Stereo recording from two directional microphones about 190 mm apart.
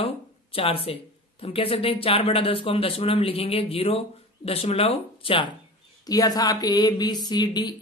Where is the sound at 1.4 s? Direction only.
30° left (ahead or behind).